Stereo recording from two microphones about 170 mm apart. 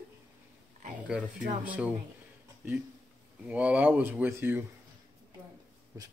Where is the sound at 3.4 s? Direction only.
10° right (ahead or behind).